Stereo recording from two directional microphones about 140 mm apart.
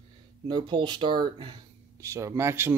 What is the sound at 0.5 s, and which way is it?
Speech, 35° right (ahead or behind).